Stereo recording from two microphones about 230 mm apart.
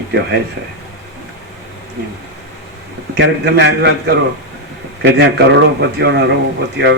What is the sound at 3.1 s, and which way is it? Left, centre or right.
Speech, right.